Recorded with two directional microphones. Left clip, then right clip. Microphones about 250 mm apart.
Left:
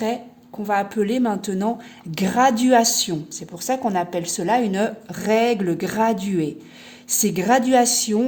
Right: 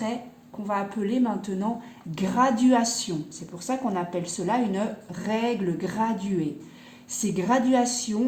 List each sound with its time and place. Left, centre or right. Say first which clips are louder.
0.7 s a woman's voice: left 7 dB; left